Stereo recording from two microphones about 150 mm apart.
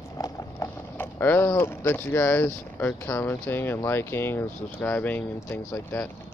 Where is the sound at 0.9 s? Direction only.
15° left (ahead or behind).